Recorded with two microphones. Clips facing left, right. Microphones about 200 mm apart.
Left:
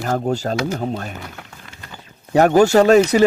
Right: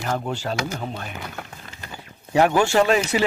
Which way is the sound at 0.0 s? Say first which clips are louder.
Left 6 dB; 40° left (ahead or behind).